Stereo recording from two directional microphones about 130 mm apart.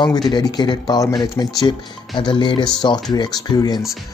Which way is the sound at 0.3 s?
30° left (ahead or behind).